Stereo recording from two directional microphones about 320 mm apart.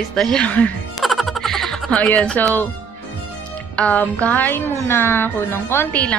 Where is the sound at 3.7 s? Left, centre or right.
Centre.